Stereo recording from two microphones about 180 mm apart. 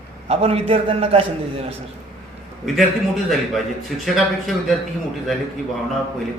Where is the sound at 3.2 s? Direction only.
Centre (ahead or behind).